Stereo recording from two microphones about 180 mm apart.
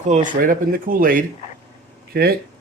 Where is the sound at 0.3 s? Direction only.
50° right (ahead or behind).